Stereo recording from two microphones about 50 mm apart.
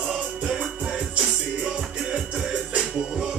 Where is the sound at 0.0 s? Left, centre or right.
Centre.